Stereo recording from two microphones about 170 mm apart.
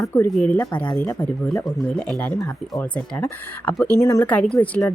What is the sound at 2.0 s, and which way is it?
Speech, 5° left (ahead or behind).